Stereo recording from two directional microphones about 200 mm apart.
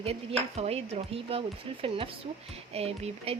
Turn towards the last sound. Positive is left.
turn(degrees=-30)  # may be behind; listen again after turning